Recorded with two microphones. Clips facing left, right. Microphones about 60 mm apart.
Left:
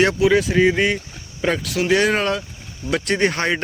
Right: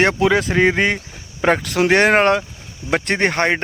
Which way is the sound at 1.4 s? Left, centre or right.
Right.